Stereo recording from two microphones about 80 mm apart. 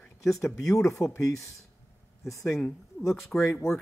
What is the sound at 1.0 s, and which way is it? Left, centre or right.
Speech, centre.